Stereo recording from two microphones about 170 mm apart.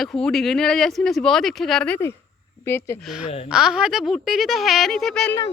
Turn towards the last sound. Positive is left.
turn(degrees=5)  # may be behind; listen again after turning